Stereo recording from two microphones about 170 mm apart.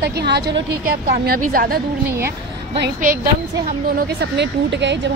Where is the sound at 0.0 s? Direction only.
75° right (ahead or behind).